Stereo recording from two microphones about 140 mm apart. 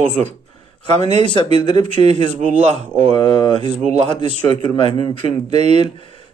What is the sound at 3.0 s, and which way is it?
A man's voice, 50° right (ahead or behind).